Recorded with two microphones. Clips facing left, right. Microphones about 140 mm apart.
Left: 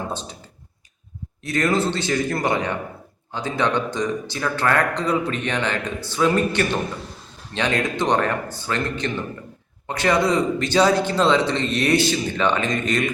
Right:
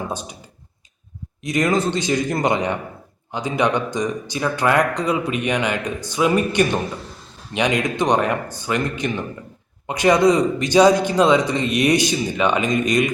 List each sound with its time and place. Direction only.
0.1 s speech: 10° right (ahead or behind)
1.5 s speech: 15° right (ahead or behind)